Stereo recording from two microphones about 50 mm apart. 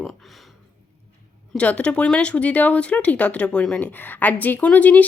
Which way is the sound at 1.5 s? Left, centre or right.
Left.